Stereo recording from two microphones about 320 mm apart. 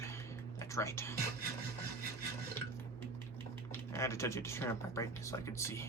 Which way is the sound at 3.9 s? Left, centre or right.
Centre.